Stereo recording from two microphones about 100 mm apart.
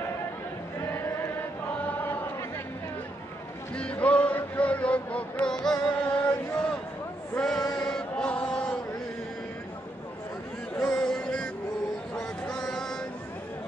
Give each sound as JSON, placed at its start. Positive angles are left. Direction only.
{"t": 0.7, "sound": "male singing", "side_deg": 25}
{"t": 3.7, "sound": "a sound", "side_deg": 10}
{"t": 7.3, "sound": "male singing", "side_deg": 5}
{"t": 7.7, "sound": "chant", "side_deg": 10}
{"t": 10.8, "sound": "music", "side_deg": 10}
{"t": 12.2, "sound": "a sound", "side_deg": 5}